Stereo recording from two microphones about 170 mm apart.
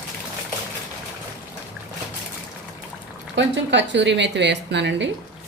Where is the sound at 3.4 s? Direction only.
90° right.